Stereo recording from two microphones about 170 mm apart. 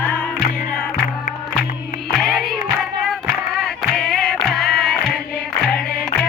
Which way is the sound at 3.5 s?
Centre (ahead or behind).